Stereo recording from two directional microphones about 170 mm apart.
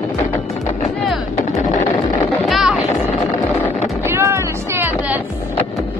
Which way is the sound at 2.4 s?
Centre (ahead or behind).